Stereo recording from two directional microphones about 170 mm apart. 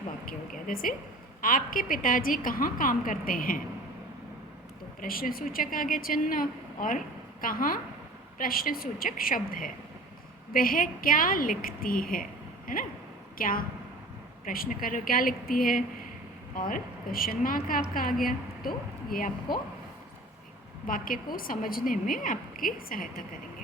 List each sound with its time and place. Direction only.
0.3 s a woman's voice: 55° left (ahead or behind)
4.9 s a woman's voice: 55° left (ahead or behind)
20.8 s a woman's voice: 55° left (ahead or behind)